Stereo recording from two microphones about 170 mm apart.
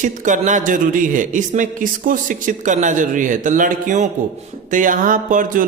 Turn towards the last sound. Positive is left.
turn(degrees=-50)  # may be behind; listen again after turning